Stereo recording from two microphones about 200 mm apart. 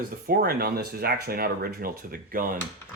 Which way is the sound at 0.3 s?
50° right (ahead or behind).